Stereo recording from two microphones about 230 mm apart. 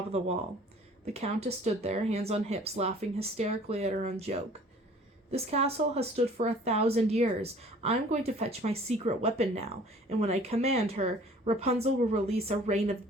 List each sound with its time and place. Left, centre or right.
0.1 s speech: right
5.3 s speech: right